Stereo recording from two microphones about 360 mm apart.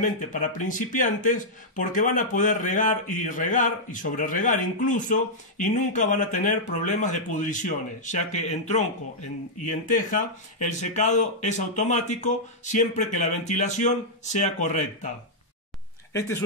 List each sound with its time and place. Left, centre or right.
0.0 s speech: left
16.1 s speech: centre